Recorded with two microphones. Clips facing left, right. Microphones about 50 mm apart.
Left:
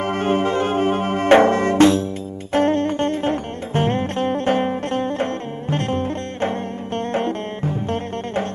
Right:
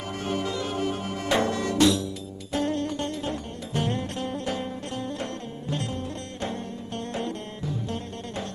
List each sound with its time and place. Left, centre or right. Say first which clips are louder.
0.0 s music: left 10 dB; left